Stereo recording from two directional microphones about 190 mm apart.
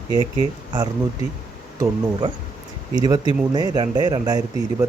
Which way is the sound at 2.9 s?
20° right (ahead or behind).